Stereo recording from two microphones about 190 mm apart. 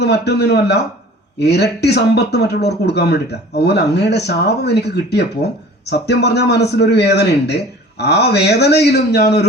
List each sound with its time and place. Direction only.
0.0 s speech: 60° left (ahead or behind)